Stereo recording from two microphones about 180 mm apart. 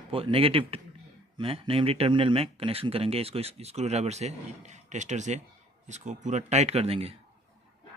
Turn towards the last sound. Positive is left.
turn(degrees=-35)  # may be behind; listen again after turning